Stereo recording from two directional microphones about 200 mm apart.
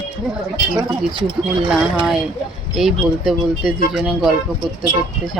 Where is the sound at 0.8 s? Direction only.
25° right (ahead or behind).